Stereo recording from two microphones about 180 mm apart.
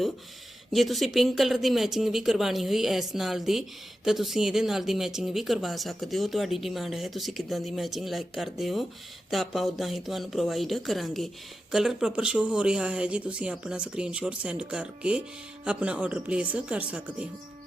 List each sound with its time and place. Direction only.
0.7 s speech: centre (ahead or behind)